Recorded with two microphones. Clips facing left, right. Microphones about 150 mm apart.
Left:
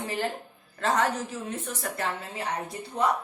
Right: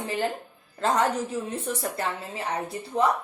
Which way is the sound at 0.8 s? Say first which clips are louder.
Right 2 dB; 30° right (ahead or behind).